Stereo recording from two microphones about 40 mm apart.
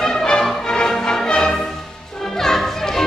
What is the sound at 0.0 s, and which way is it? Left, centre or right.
Music, centre.